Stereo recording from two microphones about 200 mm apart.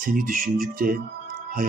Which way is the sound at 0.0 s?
45° right (ahead or behind).